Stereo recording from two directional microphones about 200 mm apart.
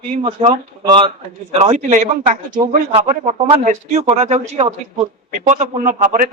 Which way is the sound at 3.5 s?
35° right (ahead or behind).